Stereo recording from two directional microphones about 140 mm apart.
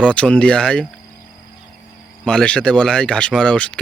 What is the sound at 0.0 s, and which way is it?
Speech, 5° left (ahead or behind).